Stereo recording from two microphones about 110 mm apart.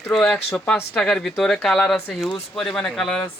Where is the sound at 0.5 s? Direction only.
10° left (ahead or behind).